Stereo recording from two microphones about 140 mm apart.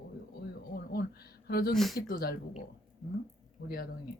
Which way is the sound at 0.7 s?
90° left.